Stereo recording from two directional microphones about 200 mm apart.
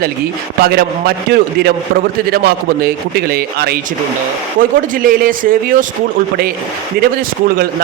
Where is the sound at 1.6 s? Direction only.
50° right (ahead or behind).